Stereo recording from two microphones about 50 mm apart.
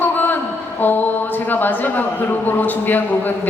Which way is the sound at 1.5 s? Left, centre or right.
Left.